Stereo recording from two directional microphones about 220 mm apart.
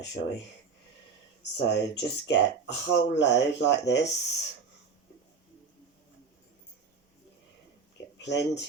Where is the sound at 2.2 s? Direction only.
50° left (ahead or behind).